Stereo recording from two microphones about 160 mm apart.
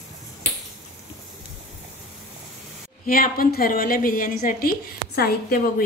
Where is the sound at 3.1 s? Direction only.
65° left (ahead or behind).